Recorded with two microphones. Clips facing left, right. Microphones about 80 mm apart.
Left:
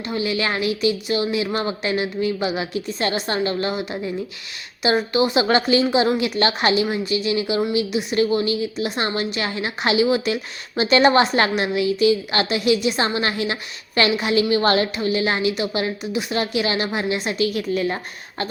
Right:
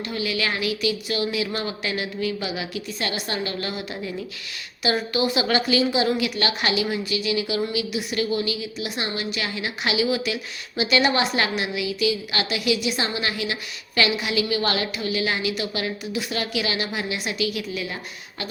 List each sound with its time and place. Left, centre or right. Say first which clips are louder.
0.1 s a woman's voice: left 4 dB; left